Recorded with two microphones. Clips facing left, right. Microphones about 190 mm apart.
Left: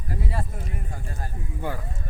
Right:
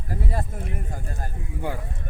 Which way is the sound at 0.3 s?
45° right (ahead or behind).